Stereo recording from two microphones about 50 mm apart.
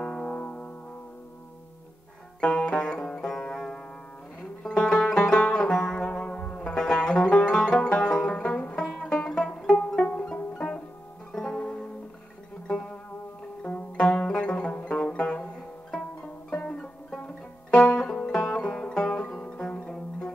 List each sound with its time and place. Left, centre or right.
0.0 s music: left
2.4 s music: left
8.4 s banjo: left
9.0 s music: centre
10.0 s music: left
13.6 s music: left